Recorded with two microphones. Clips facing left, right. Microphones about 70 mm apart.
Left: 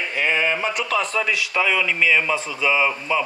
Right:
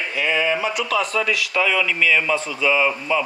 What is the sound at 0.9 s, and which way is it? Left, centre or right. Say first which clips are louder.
Speech: right 1 dB; left.